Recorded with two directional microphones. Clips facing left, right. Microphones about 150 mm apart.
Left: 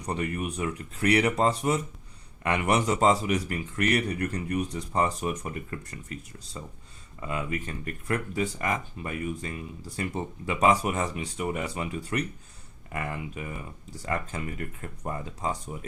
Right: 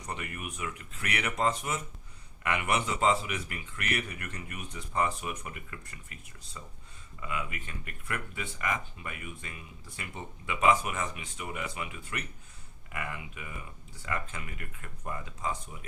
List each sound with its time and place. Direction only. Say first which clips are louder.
0.0 s speech: left 9 dB; 35° left (ahead or behind)